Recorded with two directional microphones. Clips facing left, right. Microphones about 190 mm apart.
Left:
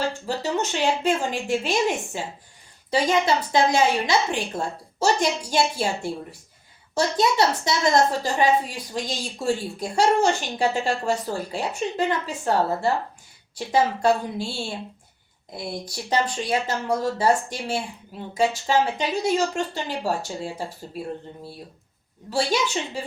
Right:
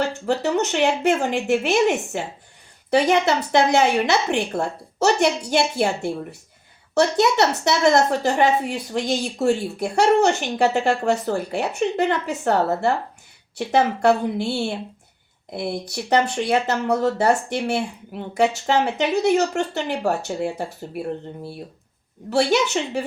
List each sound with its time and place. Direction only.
0.0 s speech: 65° right (ahead or behind)
22.3 s speech: 65° right (ahead or behind)